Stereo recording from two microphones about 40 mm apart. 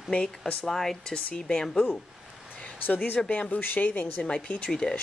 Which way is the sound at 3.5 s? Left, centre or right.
Left.